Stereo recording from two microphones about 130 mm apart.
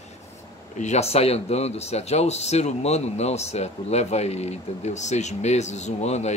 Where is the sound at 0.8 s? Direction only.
60° left (ahead or behind).